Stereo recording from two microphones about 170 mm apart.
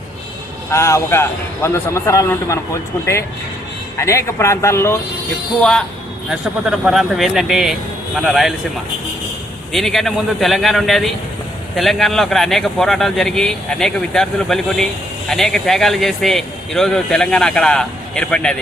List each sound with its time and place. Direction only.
0.7 s a man's voice: 15° left (ahead or behind)
3.9 s a man's voice: 15° left (ahead or behind)
6.7 s a man's voice: centre (ahead or behind)
9.7 s a man's voice: centre (ahead or behind)